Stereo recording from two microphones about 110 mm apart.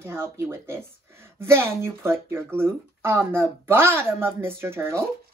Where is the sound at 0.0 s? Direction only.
25° right (ahead or behind).